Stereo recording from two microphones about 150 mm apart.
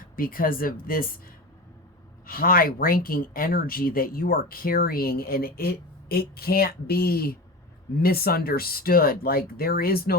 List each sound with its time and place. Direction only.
0.0 s speech: 70° left (ahead or behind)
2.2 s speech: 75° left (ahead or behind)